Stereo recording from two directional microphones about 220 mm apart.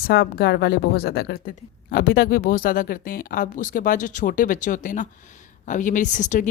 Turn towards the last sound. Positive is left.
turn(degrees=35)  # may be behind; listen again after turning